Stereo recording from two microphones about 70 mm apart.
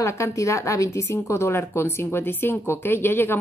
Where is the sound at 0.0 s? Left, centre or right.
Left.